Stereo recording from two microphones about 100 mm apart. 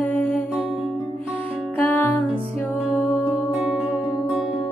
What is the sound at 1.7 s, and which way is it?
Music, 15° left (ahead or behind).